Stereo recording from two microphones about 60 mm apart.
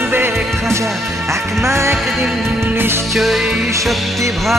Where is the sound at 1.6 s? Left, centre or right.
Right.